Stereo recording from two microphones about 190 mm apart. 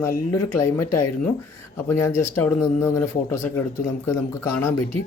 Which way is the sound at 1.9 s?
15° left (ahead or behind).